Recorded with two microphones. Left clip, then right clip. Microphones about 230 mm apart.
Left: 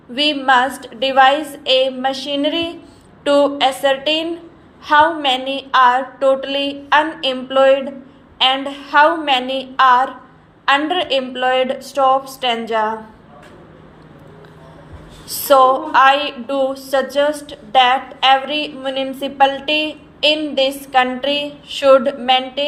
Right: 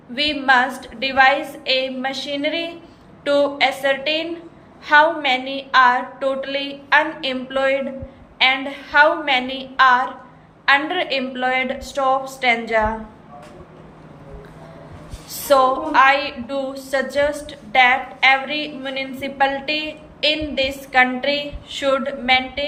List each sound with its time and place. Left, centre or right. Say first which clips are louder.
0.1 s a woman's voice: left 3 dB; centre
15.3 s a woman's voice: left 4 dB; left